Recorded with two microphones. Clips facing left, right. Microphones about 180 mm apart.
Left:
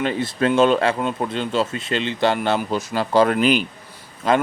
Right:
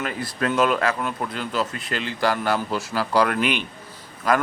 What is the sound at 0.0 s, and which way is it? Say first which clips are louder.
Speech: left 6 dB; 25° left (ahead or behind).